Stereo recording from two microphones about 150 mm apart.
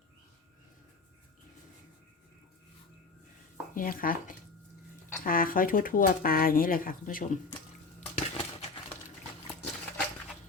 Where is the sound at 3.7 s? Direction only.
65° left (ahead or behind).